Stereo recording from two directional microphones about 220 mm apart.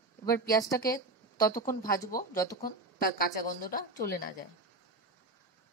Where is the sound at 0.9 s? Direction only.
15° left (ahead or behind).